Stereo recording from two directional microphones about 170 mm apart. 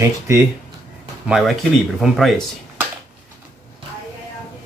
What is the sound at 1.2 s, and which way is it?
Speech, 5° right (ahead or behind).